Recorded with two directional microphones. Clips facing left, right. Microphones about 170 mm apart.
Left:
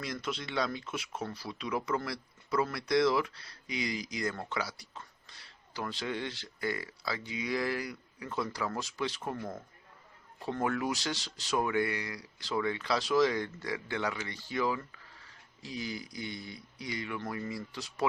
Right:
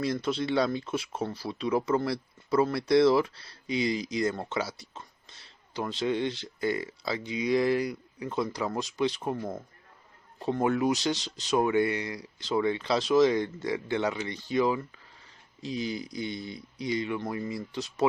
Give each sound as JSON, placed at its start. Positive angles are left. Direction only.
{"t": 0.0, "sound": "speech", "side_deg": -30}